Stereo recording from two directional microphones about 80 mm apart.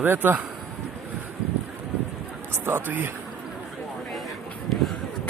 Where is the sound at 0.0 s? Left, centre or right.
Right.